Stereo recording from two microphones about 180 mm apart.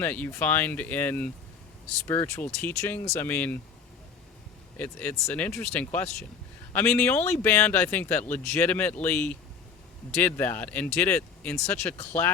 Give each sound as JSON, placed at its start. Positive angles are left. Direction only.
{"t": 0.0, "sound": "speech", "side_deg": 10}
{"t": 4.8, "sound": "speech", "side_deg": 10}